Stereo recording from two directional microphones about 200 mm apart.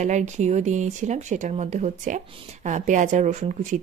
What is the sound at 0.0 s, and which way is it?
Speech, 35° right (ahead or behind).